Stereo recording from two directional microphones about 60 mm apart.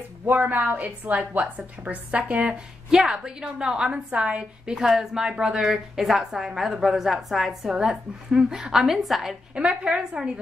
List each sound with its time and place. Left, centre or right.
0.3 s a woman's voice: right
4.7 s a woman's voice: centre
9.6 s a woman's voice: centre